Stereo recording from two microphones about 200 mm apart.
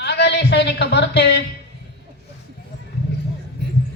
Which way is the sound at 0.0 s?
55° left (ahead or behind).